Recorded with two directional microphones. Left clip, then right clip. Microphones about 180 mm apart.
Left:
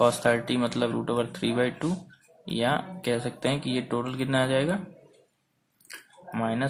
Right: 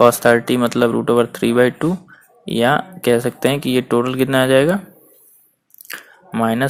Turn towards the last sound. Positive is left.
turn(degrees=-35)  # may be behind; listen again after turning